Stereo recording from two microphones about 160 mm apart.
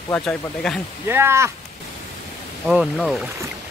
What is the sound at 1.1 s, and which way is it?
Speech, 15° right (ahead or behind).